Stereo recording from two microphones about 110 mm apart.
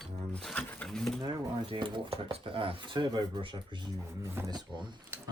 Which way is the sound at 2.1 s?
65° right (ahead or behind).